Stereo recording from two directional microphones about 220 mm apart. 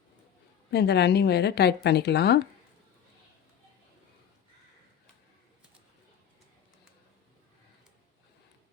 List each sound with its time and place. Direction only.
0.7 s a woman's voice: 50° left (ahead or behind)